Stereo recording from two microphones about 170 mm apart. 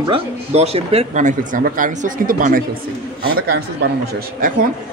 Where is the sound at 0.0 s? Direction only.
35° right (ahead or behind); by 2.6 s 55° right (ahead or behind).